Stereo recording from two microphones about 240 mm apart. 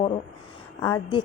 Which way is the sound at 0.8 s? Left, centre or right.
Centre.